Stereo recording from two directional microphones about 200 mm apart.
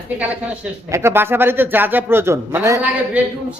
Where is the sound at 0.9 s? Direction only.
10° right (ahead or behind).